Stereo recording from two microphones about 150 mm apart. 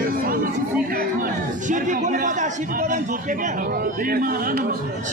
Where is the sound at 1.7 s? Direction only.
55° right (ahead or behind).